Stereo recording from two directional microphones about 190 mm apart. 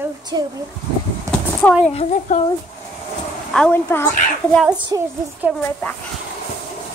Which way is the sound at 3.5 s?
10° left (ahead or behind).